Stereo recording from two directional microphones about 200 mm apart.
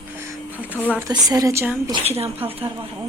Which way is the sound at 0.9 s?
15° right (ahead or behind).